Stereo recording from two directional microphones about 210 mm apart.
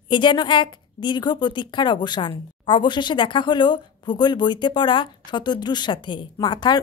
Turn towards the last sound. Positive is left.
turn(degrees=20)  # may be behind; listen again after turning